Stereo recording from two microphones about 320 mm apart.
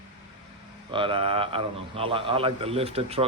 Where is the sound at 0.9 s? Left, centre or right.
Centre.